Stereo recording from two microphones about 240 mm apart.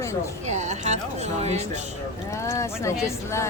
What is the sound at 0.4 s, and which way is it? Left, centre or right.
Speech, right.